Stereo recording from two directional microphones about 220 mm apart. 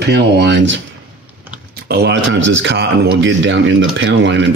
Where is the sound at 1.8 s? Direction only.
50° right (ahead or behind).